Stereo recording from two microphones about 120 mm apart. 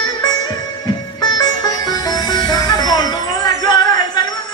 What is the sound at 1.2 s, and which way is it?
Music, 35° left (ahead or behind).